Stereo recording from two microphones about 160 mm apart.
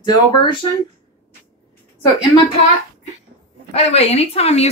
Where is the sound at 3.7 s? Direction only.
40° left (ahead or behind).